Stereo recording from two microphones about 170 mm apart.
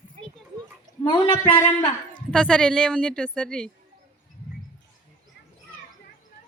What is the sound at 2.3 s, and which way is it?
A woman's voice, 5° left (ahead or behind).